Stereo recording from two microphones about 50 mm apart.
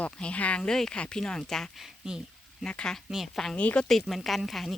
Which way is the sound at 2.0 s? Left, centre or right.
Centre.